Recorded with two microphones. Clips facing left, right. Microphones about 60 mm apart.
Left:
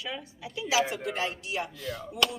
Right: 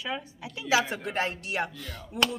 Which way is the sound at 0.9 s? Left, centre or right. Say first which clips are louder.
Right 1 dB; right.